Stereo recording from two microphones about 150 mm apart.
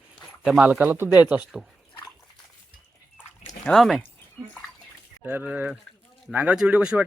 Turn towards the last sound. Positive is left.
turn(degrees=-10)  # may be behind; listen again after turning